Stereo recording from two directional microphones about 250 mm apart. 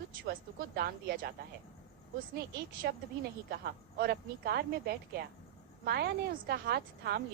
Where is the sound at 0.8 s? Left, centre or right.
Right.